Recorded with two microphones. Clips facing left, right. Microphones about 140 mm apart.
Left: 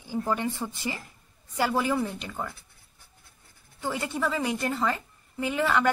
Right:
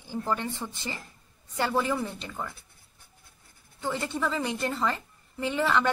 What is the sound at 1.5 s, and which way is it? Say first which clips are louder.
Speech: left 2 dB; 5° left (ahead or behind).